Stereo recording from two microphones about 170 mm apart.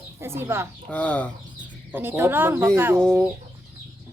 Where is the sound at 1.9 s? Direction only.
10° right (ahead or behind).